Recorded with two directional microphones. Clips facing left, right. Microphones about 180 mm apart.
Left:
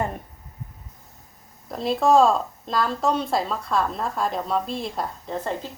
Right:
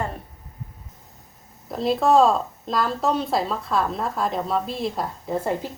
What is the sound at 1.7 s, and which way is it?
Speech, centre (ahead or behind).